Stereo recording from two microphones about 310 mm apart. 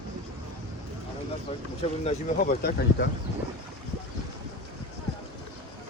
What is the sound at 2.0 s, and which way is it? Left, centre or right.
Speech, left.